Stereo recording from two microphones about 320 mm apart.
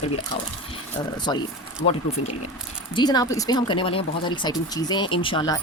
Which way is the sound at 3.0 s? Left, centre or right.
Centre.